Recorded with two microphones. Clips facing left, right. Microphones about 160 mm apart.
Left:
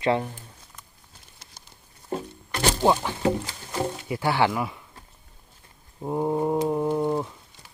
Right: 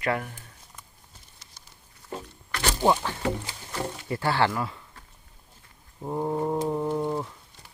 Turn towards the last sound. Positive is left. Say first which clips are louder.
# left 3 dB
turn(degrees=15)  # may be behind; listen again after turning